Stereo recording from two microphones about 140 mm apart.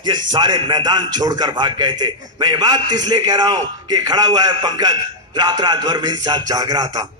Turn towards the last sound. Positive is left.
turn(degrees=-30)  # may be behind; listen again after turning